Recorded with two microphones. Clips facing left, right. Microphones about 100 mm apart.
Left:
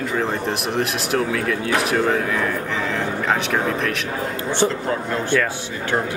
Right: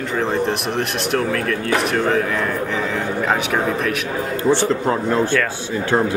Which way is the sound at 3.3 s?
5° right (ahead or behind).